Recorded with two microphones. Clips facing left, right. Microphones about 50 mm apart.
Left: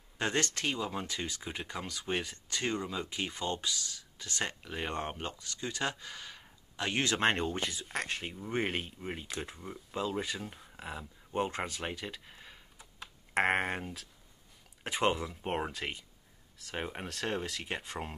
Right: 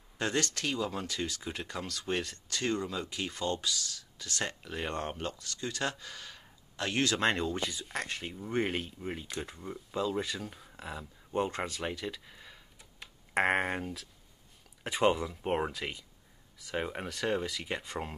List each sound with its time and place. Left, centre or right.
0.2 s speech: left
7.7 s speech: centre
15.8 s speech: centre